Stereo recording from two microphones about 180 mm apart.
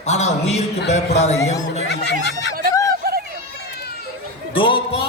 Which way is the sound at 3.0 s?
60° right (ahead or behind).